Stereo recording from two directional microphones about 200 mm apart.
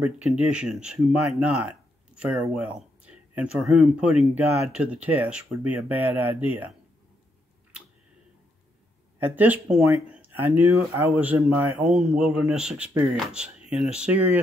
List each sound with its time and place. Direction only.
0.0 s a man's voice: 5° right (ahead or behind)
9.2 s a man's voice: 10° right (ahead or behind)